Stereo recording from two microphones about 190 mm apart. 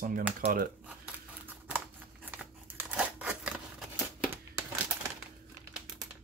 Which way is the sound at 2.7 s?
5° right (ahead or behind).